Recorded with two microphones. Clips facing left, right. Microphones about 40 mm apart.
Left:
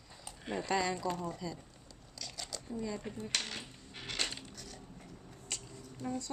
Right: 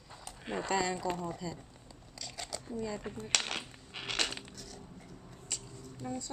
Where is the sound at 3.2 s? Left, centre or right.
Right.